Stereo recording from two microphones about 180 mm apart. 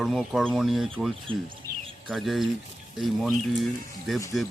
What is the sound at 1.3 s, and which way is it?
Speech, 30° right (ahead or behind).